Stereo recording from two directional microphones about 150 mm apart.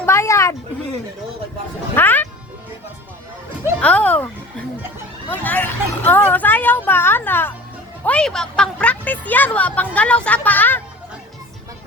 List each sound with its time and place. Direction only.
0.0 s a sound: 20° left (ahead or behind)
2.0 s music: 15° left (ahead or behind)
3.8 s a woman's voice: 10° left (ahead or behind)
5.3 s a woman's voice: 10° left (ahead or behind)